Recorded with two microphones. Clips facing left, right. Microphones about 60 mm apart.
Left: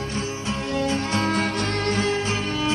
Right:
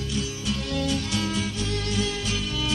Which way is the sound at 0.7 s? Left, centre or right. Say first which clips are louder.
Left 5 dB; left.